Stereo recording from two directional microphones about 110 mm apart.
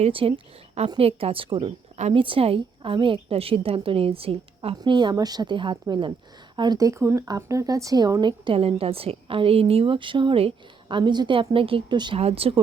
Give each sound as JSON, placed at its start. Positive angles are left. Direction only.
{"t": 0.0, "sound": "a woman's voice", "side_deg": -60}
{"t": 4.8, "sound": "a woman's voice", "side_deg": -45}
{"t": 8.5, "sound": "a woman's voice", "side_deg": -60}
{"t": 12.2, "sound": "a woman's voice", "side_deg": -60}